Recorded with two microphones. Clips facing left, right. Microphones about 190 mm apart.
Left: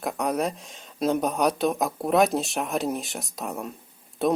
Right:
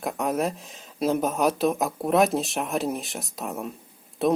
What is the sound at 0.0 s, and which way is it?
Speech, centre (ahead or behind).